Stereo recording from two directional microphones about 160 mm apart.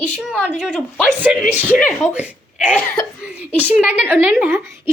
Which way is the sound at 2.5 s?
10° right (ahead or behind).